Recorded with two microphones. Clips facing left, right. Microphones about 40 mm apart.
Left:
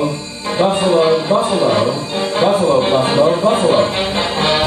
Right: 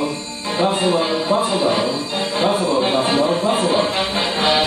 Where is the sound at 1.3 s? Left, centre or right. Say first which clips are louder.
Left 3 dB; left.